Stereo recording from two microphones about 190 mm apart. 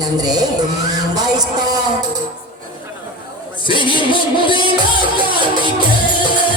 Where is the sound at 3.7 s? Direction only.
25° left (ahead or behind).